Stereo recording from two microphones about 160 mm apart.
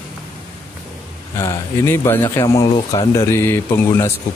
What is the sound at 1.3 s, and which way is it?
A man's voice, 15° left (ahead or behind).